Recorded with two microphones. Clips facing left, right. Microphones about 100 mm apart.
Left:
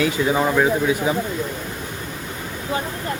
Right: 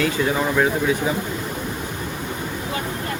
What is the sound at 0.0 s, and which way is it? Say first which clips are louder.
Speech: left 2 dB; 15° left (ahead or behind).